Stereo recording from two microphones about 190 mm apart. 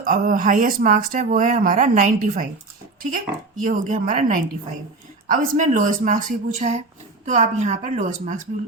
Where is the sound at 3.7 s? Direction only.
45° right (ahead or behind).